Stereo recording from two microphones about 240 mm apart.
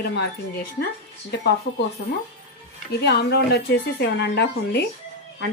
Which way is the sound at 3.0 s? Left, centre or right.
Left.